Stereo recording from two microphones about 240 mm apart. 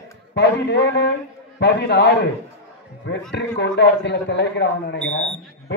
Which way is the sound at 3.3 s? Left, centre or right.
Left.